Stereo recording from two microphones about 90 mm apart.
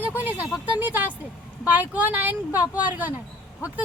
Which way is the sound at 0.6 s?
20° right (ahead or behind).